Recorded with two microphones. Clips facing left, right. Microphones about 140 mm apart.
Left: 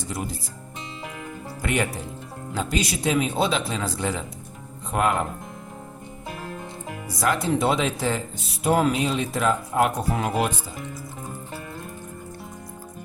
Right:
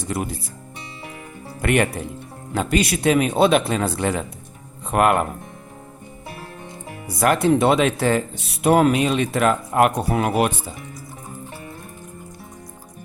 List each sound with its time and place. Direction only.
0.0 s speech: 60° right (ahead or behind)
1.6 s speech: 60° right (ahead or behind)
7.2 s speech: 60° right (ahead or behind)